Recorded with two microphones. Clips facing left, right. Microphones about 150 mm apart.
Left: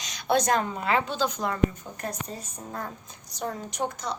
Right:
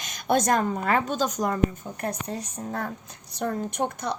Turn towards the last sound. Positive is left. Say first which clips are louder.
# right 3 dB
turn(degrees=-55)  # may be behind; listen again after turning